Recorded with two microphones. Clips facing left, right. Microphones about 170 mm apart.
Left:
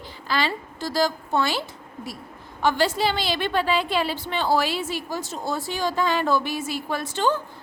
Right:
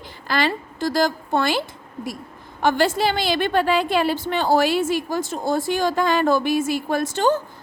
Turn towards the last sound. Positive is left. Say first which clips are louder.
# right 4 dB
turn(degrees=-45)  # may be behind; listen again after turning